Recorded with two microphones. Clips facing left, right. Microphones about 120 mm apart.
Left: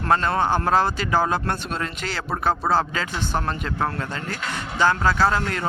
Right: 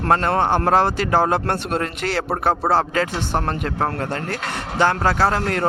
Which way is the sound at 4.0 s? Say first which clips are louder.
Right 4 dB; 65° right (ahead or behind).